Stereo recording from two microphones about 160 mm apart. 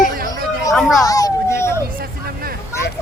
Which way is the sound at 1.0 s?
20° left (ahead or behind).